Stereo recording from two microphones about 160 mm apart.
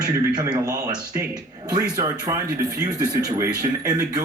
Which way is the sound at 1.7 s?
20° right (ahead or behind).